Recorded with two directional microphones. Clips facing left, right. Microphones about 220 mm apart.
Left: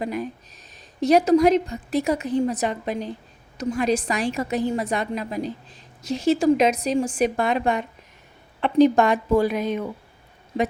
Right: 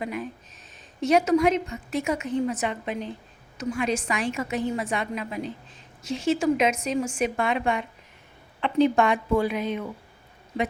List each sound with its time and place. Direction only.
0.0 s a woman's voice: 40° left (ahead or behind)